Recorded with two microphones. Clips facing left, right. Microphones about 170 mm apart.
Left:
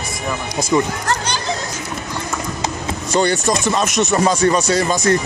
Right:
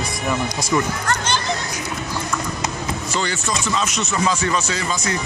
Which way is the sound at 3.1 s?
50° left (ahead or behind).